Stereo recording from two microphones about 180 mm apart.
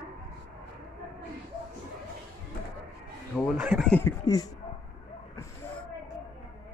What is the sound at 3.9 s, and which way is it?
Speech, 15° left (ahead or behind).